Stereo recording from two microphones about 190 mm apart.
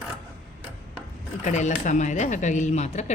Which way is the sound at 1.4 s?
40° left (ahead or behind).